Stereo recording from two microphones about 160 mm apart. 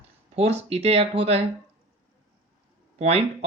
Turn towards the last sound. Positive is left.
turn(degrees=-40)  # may be behind; listen again after turning